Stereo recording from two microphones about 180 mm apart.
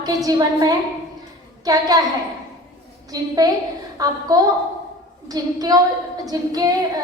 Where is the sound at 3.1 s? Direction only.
20° right (ahead or behind).